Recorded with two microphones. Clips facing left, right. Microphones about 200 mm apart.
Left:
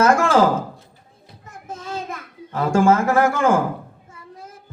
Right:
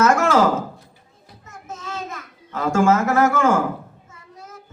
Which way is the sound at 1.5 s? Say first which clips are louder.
Left 2 dB; 30° left (ahead or behind).